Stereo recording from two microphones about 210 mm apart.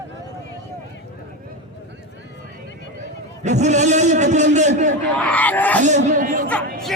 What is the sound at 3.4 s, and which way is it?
A man's voice, 35° right (ahead or behind).